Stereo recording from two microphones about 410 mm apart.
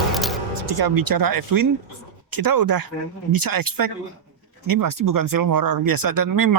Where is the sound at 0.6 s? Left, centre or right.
Right.